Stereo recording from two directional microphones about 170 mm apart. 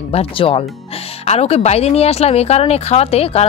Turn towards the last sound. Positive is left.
turn(degrees=35)  # may be behind; listen again after turning